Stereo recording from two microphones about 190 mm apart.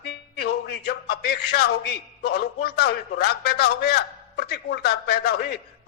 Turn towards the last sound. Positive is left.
turn(degrees=55)  # may be behind; listen again after turning